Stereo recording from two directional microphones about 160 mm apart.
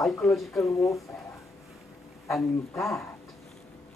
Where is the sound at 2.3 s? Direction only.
Centre (ahead or behind).